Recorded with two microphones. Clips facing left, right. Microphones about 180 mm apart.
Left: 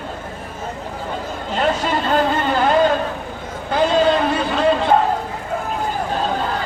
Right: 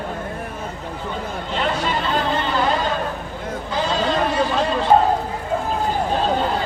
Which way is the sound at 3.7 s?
55° left (ahead or behind).